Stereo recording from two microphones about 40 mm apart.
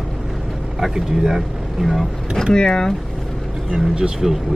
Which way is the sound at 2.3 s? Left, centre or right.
Centre.